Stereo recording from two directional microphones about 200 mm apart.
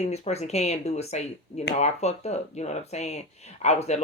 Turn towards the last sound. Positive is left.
turn(degrees=35)  # may be behind; listen again after turning